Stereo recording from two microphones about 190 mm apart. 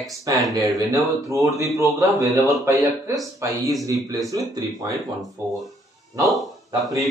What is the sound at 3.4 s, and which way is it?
Speech, 15° right (ahead or behind).